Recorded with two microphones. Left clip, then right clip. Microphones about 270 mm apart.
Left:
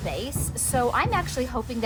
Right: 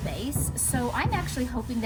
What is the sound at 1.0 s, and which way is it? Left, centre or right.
Speech, centre.